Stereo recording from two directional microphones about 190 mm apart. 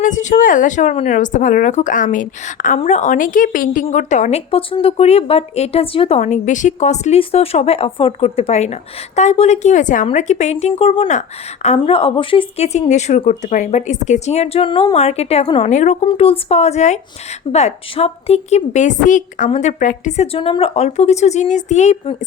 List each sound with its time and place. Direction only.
0.0 s speech: 40° left (ahead or behind)